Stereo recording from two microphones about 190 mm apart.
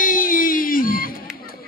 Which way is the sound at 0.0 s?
45° left (ahead or behind).